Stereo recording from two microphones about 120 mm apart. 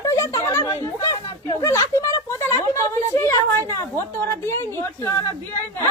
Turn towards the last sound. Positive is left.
turn(degrees=20)  # may be behind; listen again after turning